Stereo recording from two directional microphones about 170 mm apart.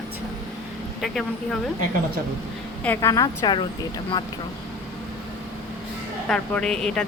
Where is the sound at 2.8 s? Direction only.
15° left (ahead or behind).